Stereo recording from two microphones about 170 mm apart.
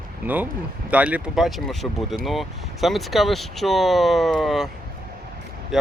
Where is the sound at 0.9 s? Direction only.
10° right (ahead or behind).